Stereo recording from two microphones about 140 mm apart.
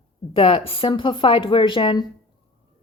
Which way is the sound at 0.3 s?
40° left (ahead or behind).